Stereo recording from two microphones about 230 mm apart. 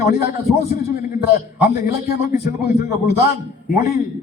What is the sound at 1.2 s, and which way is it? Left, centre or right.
A man's voice, left.